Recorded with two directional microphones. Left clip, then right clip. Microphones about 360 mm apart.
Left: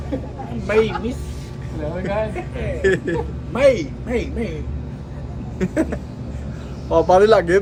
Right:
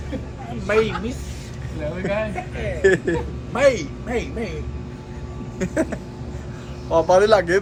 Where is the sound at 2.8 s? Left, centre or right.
Centre.